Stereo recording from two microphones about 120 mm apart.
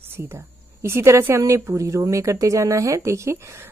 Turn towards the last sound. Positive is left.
turn(degrees=-25)  # may be behind; listen again after turning